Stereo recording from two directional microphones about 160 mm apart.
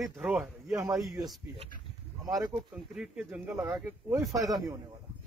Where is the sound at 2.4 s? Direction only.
5° right (ahead or behind).